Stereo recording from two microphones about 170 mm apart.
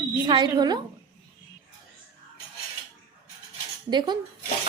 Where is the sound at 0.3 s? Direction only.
25° right (ahead or behind).